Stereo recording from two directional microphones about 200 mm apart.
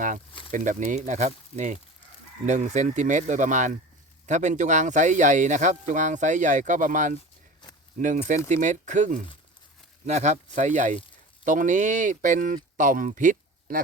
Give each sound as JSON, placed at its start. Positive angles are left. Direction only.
{"t": 0.5, "sound": "speech", "side_deg": -40}